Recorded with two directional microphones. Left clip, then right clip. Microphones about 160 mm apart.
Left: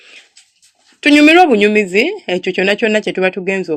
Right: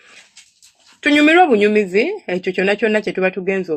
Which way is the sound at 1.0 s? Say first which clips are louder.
Left 4 dB; 30° left (ahead or behind).